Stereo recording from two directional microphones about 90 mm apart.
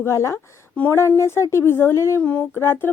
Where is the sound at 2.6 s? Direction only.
25° left (ahead or behind).